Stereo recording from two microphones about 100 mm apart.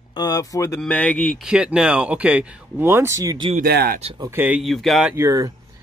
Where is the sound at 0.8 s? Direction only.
15° left (ahead or behind).